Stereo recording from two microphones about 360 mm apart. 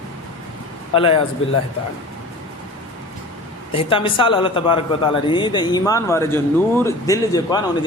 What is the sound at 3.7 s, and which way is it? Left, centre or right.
A man's voice, centre.